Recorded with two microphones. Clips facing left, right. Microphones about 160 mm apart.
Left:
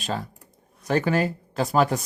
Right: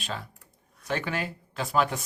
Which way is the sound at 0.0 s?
40° left (ahead or behind).